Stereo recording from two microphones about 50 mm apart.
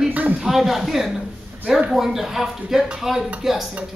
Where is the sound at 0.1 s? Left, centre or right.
Right.